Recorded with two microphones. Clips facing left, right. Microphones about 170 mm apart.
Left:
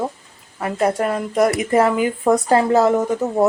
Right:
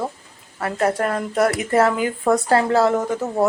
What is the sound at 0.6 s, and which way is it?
Speech, 10° left (ahead or behind).